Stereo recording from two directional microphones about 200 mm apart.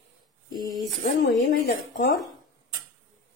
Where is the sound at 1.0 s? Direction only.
45° left (ahead or behind).